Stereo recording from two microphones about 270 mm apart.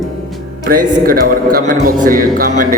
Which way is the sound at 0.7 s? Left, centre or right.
Right.